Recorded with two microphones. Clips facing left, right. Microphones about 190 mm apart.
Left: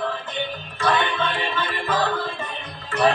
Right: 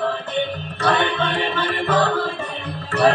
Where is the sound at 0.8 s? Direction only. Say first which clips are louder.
Right 2 dB; 60° right (ahead or behind).